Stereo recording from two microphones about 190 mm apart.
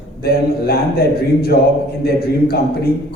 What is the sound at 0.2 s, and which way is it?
A man's voice, 55° left (ahead or behind).